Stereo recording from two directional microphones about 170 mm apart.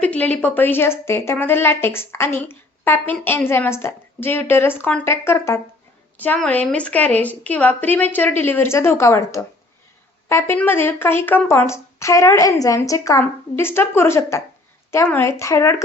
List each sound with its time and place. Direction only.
0.0 s a woman's voice: 10° left (ahead or behind)